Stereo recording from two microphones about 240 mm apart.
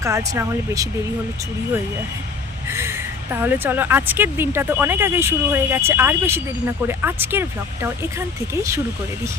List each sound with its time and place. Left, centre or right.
0.0 s speech: centre
2.6 s speech: centre